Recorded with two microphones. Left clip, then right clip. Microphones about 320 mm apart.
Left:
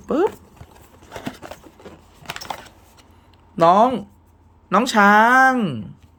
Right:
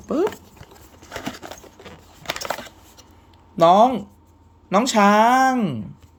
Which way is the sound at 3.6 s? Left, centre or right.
Centre.